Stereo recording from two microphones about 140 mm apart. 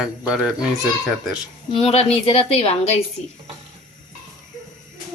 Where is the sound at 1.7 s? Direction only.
50° left (ahead or behind).